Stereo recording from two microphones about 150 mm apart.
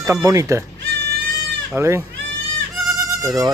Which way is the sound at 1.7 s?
20° right (ahead or behind).